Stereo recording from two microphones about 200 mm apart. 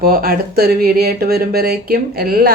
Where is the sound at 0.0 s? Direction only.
50° right (ahead or behind).